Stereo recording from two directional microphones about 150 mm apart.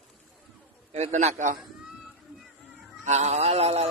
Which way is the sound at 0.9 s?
45° right (ahead or behind).